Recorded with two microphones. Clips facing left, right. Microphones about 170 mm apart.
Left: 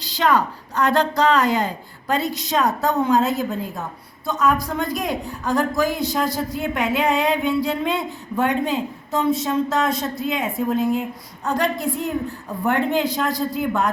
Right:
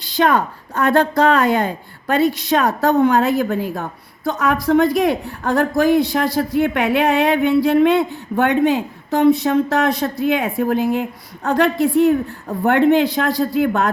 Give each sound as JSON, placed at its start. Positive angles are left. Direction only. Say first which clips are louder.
{"t": 0.0, "sound": "a woman's voice", "louder": "right 3 dB", "side_deg": -50}